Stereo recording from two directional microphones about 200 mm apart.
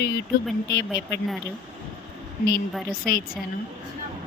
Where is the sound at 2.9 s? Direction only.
45° left (ahead or behind).